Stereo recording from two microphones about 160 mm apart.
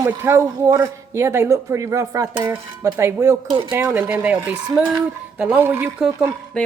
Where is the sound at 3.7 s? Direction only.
15° right (ahead or behind).